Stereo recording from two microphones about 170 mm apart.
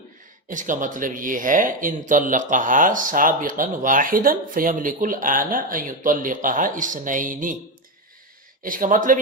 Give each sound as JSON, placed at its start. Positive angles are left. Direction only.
{"t": 0.4, "sound": "speech", "side_deg": -50}
{"t": 8.6, "sound": "speech", "side_deg": -55}